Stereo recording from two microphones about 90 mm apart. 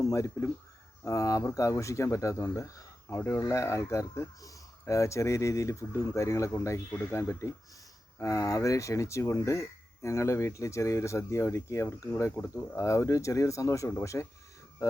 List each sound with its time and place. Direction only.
0.0 s speech: 35° left (ahead or behind)